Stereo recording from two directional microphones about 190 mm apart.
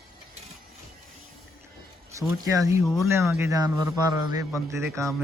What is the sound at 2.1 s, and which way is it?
Speech, 15° right (ahead or behind).